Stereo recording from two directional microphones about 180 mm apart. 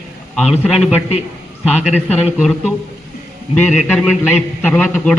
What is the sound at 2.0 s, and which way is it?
A man's voice, 5° left (ahead or behind).